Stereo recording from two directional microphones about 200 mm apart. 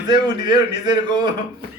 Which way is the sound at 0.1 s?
20° right (ahead or behind).